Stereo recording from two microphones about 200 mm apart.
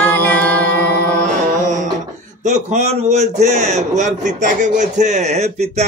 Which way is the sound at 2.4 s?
35° right (ahead or behind).